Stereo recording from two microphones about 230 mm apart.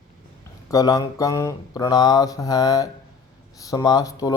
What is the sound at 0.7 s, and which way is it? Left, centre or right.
Speech, centre.